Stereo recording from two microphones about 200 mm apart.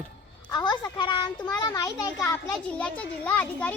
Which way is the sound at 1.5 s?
20° left (ahead or behind).